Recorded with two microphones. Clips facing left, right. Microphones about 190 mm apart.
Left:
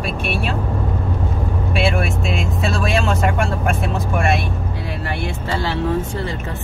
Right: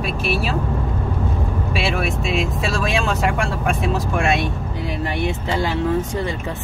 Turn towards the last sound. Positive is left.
turn(degrees=-15)  # may be behind; listen again after turning